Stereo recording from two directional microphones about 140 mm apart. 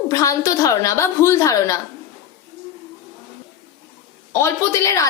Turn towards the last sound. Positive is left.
turn(degrees=20)  # may be behind; listen again after turning